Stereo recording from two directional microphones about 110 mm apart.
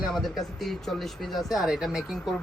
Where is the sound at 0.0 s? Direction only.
Centre (ahead or behind).